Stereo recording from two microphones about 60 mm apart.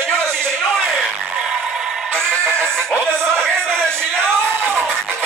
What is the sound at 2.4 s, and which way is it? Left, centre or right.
Music, centre.